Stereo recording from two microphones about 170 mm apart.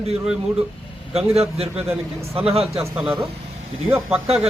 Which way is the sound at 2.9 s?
5° right (ahead or behind).